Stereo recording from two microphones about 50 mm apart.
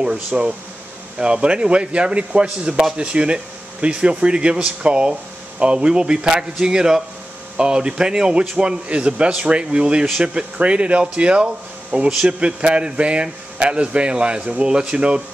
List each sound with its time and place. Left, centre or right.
0.3 s speech: centre